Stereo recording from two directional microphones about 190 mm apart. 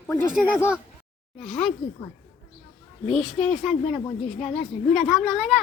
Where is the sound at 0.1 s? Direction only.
15° left (ahead or behind).